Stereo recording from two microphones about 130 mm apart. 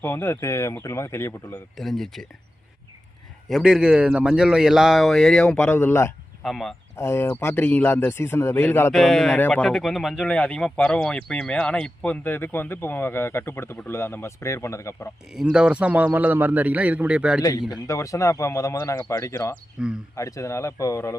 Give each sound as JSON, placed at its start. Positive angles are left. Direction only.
{"t": 0.0, "sound": "speech", "side_deg": 15}
{"t": 1.7, "sound": "speech", "side_deg": 0}
{"t": 3.5, "sound": "speech", "side_deg": -5}
{"t": 6.4, "sound": "speech", "side_deg": 5}
{"t": 6.9, "sound": "speech", "side_deg": 20}
{"t": 8.9, "sound": "speech", "side_deg": 0}
{"t": 15.3, "sound": "a man's voice", "side_deg": -5}
{"t": 17.4, "sound": "speech", "side_deg": 30}
{"t": 19.8, "sound": "a man's voice", "side_deg": -5}
{"t": 20.1, "sound": "speech", "side_deg": 25}